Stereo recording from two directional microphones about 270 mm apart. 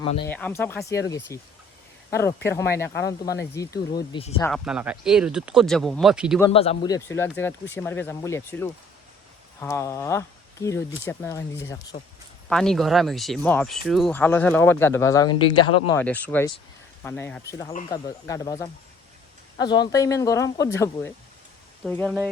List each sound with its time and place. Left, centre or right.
0.3 s speech: centre
4.4 s speech: centre
4.6 s speech: centre
6.4 s speech: left
15.9 s speech: centre